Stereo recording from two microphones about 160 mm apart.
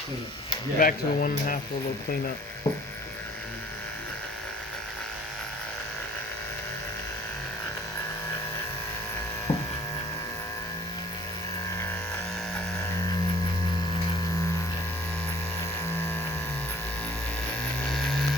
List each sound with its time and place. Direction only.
0.8 s speech: 60° left (ahead or behind)
2.7 s electric shaver: 25° left (ahead or behind)
9.5 s hum: 15° left (ahead or behind)
15.9 s a sound: 15° left (ahead or behind)